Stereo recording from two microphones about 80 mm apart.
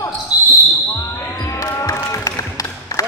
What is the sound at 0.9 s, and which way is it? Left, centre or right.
Basketball bounce, left.